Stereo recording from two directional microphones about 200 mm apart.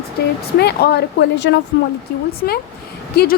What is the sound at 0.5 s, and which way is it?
A woman's voice, 55° left (ahead or behind).